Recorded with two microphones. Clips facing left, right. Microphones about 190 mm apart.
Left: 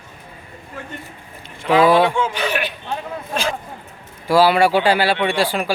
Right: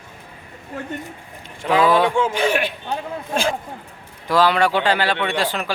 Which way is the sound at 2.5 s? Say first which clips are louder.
Right 2 dB; 25° right (ahead or behind).